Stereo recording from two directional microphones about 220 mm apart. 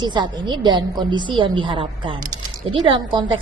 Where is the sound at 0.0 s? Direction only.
20° right (ahead or behind).